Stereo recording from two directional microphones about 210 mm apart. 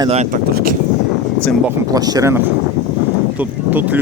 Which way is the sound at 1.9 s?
15° right (ahead or behind).